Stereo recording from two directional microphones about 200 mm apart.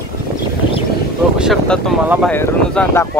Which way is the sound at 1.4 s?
Centre (ahead or behind).